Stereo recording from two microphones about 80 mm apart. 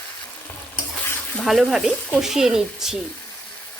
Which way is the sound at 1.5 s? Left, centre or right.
Centre.